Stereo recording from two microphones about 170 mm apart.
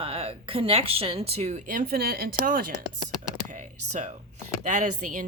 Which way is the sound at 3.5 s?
45° right (ahead or behind).